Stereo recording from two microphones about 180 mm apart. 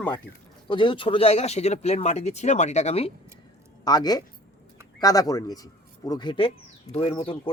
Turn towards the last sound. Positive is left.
turn(degrees=25)  # may be behind; listen again after turning